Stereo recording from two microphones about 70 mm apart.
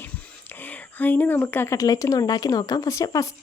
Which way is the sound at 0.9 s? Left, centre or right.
Left.